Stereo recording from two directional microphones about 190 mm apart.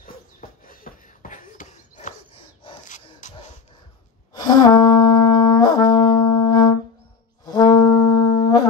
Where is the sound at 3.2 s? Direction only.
40° left (ahead or behind).